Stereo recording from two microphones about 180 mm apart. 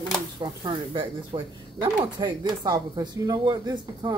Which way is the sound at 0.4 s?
25° right (ahead or behind).